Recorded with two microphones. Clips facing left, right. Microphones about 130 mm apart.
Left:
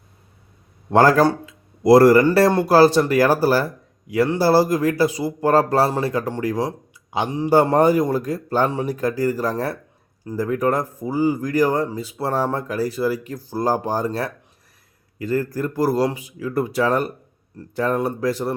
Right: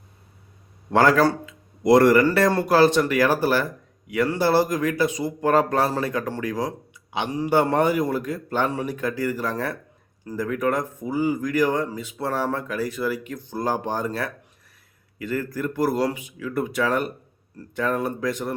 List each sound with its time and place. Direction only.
0.9 s speech: 35° left (ahead or behind)
1.3 s a sound: 35° left (ahead or behind)
2.5 s a man's voice: 25° left (ahead or behind)
2.7 s a man's voice: 35° left (ahead or behind)
7.3 s a man's voice: 25° left (ahead or behind)
7.5 s speech: 40° left (ahead or behind)